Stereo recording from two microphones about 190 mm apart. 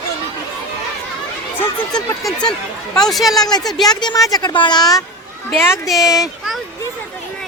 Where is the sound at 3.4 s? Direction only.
20° left (ahead or behind).